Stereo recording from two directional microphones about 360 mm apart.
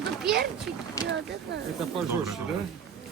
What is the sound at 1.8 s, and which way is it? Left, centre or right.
Speech, centre.